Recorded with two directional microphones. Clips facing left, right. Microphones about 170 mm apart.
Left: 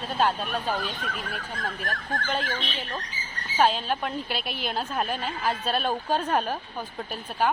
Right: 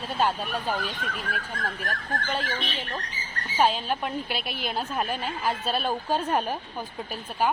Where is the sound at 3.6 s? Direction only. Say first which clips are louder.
Left 1 dB; 5° right (ahead or behind).